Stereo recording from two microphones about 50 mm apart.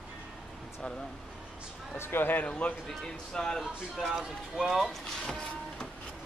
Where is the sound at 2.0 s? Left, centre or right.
Left.